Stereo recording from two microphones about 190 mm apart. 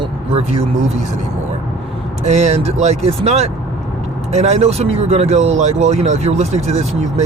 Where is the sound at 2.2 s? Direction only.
35° right (ahead or behind).